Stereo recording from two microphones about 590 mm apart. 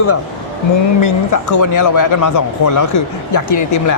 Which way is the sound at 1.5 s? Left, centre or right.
Left.